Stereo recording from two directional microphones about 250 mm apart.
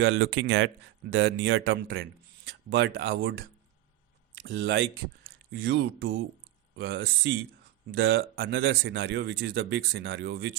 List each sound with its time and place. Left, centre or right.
0.0 s speech: right
4.4 s speech: right